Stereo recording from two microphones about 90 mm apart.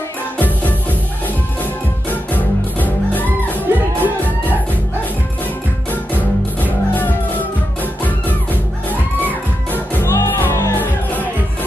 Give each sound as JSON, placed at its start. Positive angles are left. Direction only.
{"t": 0.4, "sound": "music", "side_deg": 20}
{"t": 3.7, "sound": "music", "side_deg": -25}
{"t": 4.0, "sound": "music", "side_deg": 20}
{"t": 5.9, "sound": "music", "side_deg": 20}